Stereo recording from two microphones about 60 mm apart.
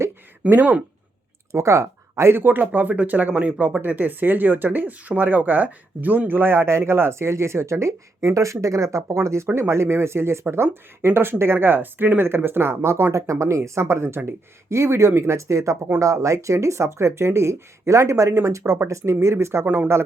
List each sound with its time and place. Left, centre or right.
0.6 s speech: right
1.5 s speech: right
2.4 s speech: right
19.6 s speech: right